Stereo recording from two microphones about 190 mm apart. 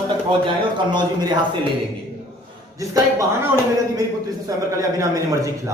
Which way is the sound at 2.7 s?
15° right (ahead or behind).